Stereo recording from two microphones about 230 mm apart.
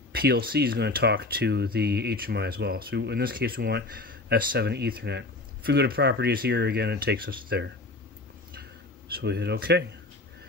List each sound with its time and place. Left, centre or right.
0.1 s speech: right
9.1 s speech: right